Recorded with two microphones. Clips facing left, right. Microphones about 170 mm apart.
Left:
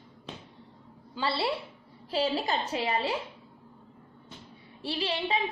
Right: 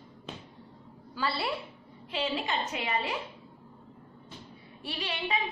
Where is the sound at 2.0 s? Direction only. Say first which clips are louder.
Left 4 dB; 35° left (ahead or behind).